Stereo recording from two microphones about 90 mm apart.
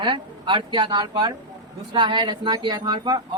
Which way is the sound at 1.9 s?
60° right (ahead or behind).